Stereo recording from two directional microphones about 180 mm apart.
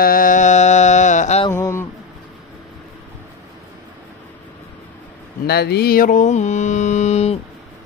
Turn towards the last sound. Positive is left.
turn(degrees=35)  # may be behind; listen again after turning